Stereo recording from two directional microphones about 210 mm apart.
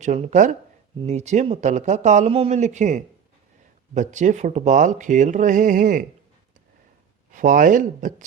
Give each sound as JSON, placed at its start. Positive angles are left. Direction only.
{"t": 0.0, "sound": "speech", "side_deg": -35}
{"t": 7.3, "sound": "speech", "side_deg": -40}